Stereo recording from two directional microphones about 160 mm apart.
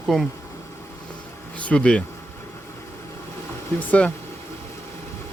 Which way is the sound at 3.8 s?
10° left (ahead or behind).